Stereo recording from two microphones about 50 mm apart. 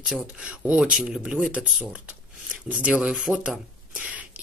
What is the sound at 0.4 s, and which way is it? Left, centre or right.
Speech, right.